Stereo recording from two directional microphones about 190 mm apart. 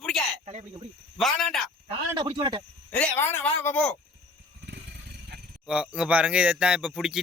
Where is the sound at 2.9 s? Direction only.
10° left (ahead or behind).